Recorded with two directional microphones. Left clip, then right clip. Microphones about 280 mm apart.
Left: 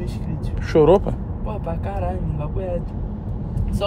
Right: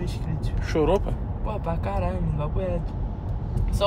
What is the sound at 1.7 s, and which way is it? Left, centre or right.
Speech, centre.